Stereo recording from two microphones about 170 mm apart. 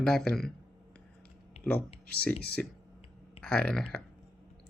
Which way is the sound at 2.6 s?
5° left (ahead or behind).